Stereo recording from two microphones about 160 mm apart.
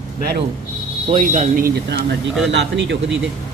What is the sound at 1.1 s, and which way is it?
Speech, 45° right (ahead or behind).